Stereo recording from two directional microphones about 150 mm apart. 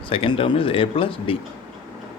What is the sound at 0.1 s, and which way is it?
Speech, 35° left (ahead or behind).